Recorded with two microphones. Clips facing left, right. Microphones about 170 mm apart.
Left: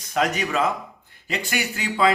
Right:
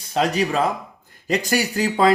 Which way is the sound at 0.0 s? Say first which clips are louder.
Right 3 dB; 30° right (ahead or behind).